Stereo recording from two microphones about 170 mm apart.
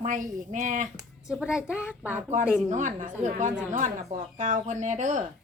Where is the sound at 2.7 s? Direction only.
45° right (ahead or behind).